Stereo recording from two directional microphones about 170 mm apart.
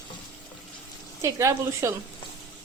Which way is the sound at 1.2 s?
15° right (ahead or behind).